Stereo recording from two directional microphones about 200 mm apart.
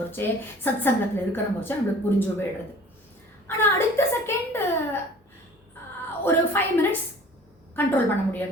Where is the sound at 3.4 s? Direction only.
10° left (ahead or behind).